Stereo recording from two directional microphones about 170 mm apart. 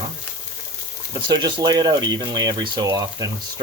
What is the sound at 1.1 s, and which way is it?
Speech, 25° right (ahead or behind).